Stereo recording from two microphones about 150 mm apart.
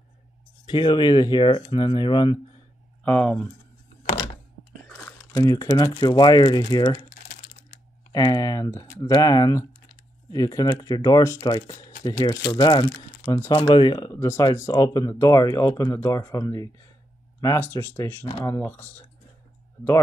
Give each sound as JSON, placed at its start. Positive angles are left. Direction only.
{"t": 0.7, "sound": "speech", "side_deg": 30}
{"t": 3.0, "sound": "speech", "side_deg": 10}
{"t": 5.0, "sound": "speech", "side_deg": 25}
{"t": 8.1, "sound": "speech", "side_deg": 25}
{"t": 13.5, "sound": "speech", "side_deg": 35}